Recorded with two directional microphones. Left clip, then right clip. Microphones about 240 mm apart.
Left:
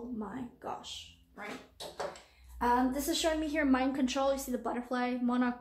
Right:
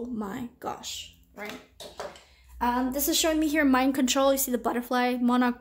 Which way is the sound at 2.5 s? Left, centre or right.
Right.